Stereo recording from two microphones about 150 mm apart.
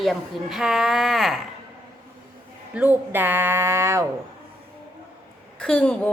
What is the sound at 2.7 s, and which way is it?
A man's voice, 10° right (ahead or behind).